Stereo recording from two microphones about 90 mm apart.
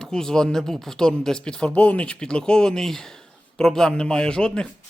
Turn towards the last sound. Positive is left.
turn(degrees=10)  # may be behind; listen again after turning